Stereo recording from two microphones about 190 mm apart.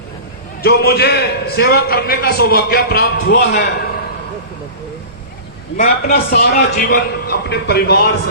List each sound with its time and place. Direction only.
0.6 s a man's voice: 55° left (ahead or behind)
5.7 s a man's voice: 50° left (ahead or behind)